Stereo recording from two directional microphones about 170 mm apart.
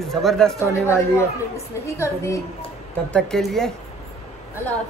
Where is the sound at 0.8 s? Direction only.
15° left (ahead or behind).